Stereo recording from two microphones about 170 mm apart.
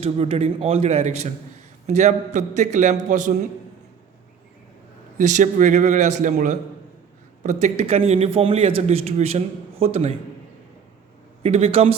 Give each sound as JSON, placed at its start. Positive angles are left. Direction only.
{"t": 0.0, "sound": "a man's voice", "side_deg": -35}
{"t": 5.1, "sound": "a man's voice", "side_deg": -45}
{"t": 11.4, "sound": "speech", "side_deg": -35}